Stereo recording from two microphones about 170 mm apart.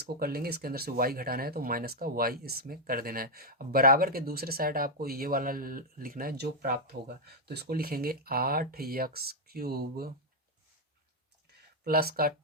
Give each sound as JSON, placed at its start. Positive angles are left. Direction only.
{"t": 0.0, "sound": "speech", "side_deg": -60}
{"t": 11.8, "sound": "speech", "side_deg": -65}